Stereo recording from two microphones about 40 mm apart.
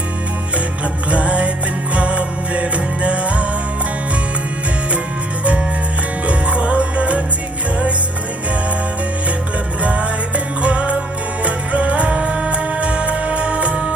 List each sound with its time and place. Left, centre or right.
1.1 s music: right
6.2 s music: right
9.8 s music: right